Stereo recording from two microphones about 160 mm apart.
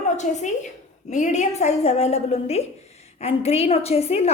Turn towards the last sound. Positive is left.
turn(degrees=40)  # may be behind; listen again after turning